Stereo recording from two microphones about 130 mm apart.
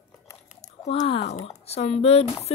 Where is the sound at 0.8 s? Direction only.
50° left (ahead or behind).